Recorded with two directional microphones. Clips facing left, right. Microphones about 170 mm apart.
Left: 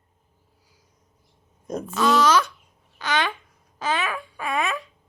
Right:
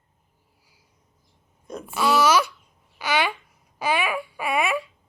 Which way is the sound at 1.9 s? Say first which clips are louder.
Even; 10° right (ahead or behind).